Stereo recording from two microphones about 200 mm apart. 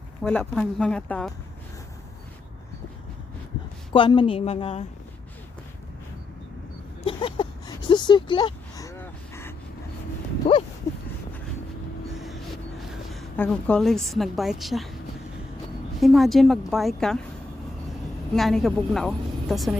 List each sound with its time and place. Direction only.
0.2 s a woman's voice: 5° left (ahead or behind)
3.9 s a woman's voice: 25° left (ahead or behind)
7.0 s a sound: 25° left (ahead or behind)
12.1 s vehicle: centre (ahead or behind)
12.9 s a woman's voice: centre (ahead or behind)
16.0 s a woman's voice: centre (ahead or behind)
18.3 s a woman's voice: centre (ahead or behind)